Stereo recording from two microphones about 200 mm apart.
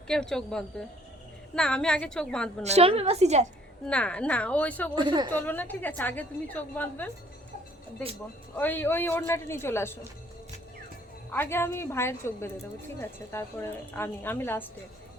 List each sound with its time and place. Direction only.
0.1 s a woman's voice: 5° left (ahead or behind)
2.6 s a woman's voice: 30° right (ahead or behind)
3.8 s a woman's voice: 5° left (ahead or behind)
4.9 s a woman's voice: 25° right (ahead or behind)
5.3 s a woman's voice: 10° left (ahead or behind)
8.5 s a woman's voice: 10° left (ahead or behind)
11.3 s a woman's voice: 10° left (ahead or behind)